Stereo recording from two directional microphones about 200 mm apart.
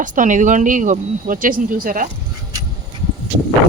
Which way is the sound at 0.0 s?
40° right (ahead or behind).